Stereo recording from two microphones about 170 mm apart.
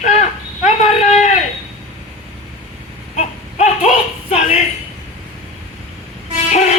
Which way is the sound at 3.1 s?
40° left (ahead or behind).